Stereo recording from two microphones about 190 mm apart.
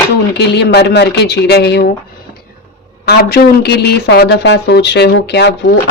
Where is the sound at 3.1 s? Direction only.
55° left (ahead or behind).